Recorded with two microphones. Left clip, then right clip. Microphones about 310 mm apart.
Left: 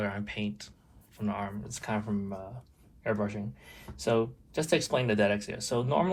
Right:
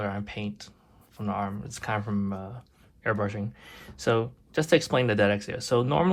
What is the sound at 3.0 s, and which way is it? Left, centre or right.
Speech, right.